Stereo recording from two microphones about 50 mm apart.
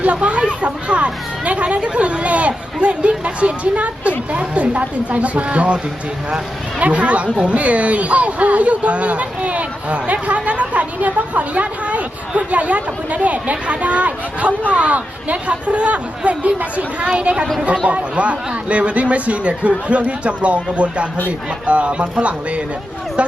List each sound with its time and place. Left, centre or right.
0.0 s speech: right
17.1 s speech: centre